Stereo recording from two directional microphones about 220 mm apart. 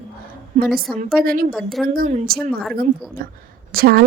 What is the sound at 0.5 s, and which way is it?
Speech, 30° right (ahead or behind).